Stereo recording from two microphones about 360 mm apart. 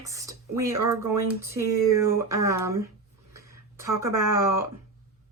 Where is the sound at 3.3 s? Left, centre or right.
Centre.